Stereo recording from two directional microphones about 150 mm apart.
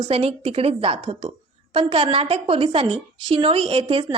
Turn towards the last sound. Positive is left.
turn(degrees=-40)  # may be behind; listen again after turning